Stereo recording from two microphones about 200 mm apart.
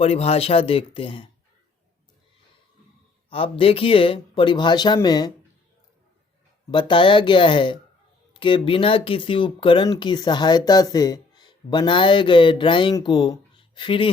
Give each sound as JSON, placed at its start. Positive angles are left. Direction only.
{"t": 0.0, "sound": "speech", "side_deg": 30}
{"t": 3.2, "sound": "speech", "side_deg": 25}
{"t": 6.7, "sound": "speech", "side_deg": 25}